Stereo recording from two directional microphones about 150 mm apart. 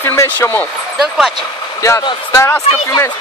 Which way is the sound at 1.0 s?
5° right (ahead or behind).